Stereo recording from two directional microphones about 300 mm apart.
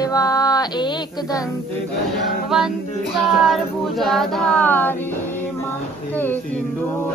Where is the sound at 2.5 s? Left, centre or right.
Centre.